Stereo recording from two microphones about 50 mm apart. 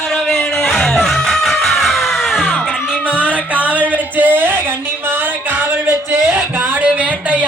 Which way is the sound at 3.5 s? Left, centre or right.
Right.